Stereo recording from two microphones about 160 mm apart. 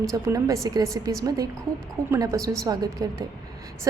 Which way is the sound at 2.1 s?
20° right (ahead or behind).